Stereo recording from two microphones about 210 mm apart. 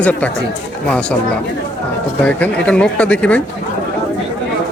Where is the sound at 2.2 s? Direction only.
5° left (ahead or behind).